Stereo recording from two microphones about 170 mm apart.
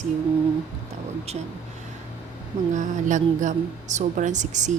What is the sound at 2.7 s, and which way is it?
Speech, 45° right (ahead or behind).